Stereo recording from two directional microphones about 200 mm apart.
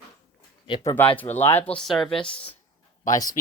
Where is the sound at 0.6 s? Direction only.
20° left (ahead or behind); by 2.1 s centre (ahead or behind).